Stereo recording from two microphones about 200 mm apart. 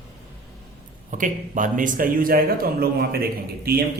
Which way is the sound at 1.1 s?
40° right (ahead or behind).